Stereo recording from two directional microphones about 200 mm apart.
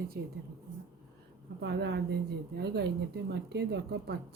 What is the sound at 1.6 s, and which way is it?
Speech, 55° right (ahead or behind).